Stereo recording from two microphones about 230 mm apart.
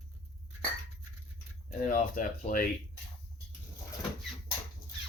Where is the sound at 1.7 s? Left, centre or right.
Left.